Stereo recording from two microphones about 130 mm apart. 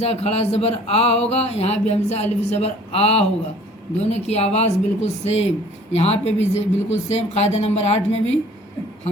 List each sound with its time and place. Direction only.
0.0 s speech: 55° left (ahead or behind)